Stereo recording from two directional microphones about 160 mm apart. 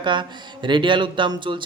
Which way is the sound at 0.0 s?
30° right (ahead or behind).